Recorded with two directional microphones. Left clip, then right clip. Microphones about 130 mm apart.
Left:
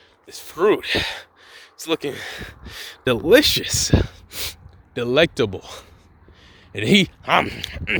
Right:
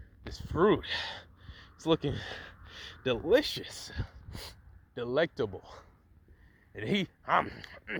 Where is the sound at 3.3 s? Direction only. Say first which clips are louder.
Left 14 dB; 65° left (ahead or behind).